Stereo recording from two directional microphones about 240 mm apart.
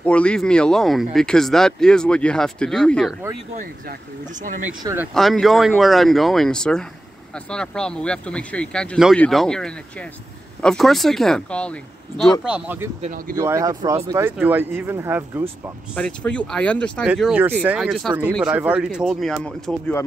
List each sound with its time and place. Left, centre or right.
0.0 s speech: centre
3.5 s speech: right
4.8 s speech: centre
13.0 s speech: right
13.4 s speech: centre
15.9 s speech: centre